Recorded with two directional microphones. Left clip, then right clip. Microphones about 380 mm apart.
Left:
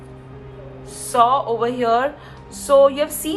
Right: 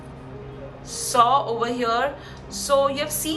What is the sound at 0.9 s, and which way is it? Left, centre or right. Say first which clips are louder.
A woman's voice: left 2 dB; centre.